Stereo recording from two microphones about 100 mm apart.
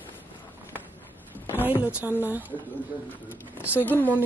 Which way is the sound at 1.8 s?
15° right (ahead or behind).